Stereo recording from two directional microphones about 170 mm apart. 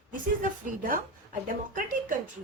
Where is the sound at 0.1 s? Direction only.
50° right (ahead or behind).